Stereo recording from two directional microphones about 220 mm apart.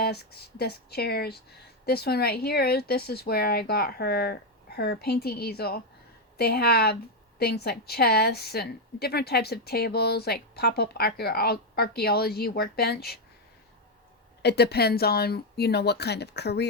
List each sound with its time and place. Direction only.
0.0 s a woman's voice: 45° left (ahead or behind)
14.4 s a woman's voice: 50° left (ahead or behind)